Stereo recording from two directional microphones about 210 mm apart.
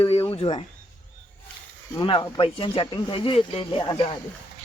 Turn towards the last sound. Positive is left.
turn(degrees=20)  # may be behind; listen again after turning